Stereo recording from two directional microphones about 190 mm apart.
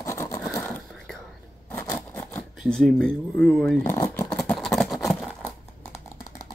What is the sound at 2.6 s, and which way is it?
Speech, centre (ahead or behind).